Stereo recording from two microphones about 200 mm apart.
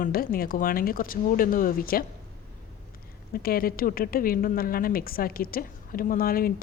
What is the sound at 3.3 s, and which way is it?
A woman's voice, 50° left (ahead or behind).